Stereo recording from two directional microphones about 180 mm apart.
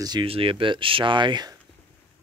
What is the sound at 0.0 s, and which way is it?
Speech, 25° right (ahead or behind).